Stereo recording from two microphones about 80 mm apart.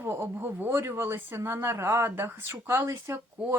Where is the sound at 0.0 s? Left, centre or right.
Right.